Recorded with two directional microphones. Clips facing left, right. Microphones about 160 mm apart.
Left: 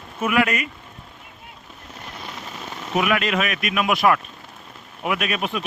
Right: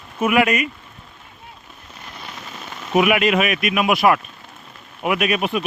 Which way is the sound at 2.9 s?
15° right (ahead or behind).